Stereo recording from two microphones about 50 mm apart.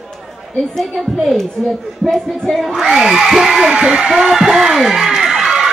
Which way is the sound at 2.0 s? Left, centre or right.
Centre.